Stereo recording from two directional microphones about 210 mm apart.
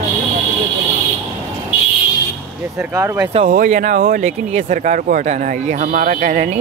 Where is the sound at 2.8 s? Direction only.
10° right (ahead or behind).